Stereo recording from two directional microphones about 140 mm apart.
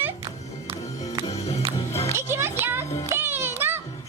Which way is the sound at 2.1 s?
20° right (ahead or behind).